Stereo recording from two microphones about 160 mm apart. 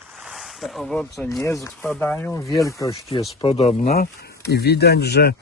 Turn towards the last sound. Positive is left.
turn(degrees=90)